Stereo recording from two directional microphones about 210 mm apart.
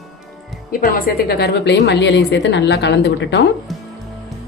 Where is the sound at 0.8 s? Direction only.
50° left (ahead or behind).